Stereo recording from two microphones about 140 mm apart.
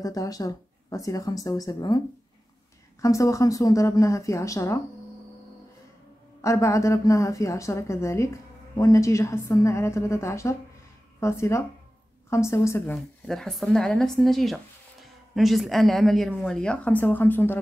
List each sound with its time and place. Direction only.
0.0 s a woman's voice: 25° left (ahead or behind)
6.4 s a woman's voice: 20° left (ahead or behind)
12.9 s a woman's voice: 5° left (ahead or behind)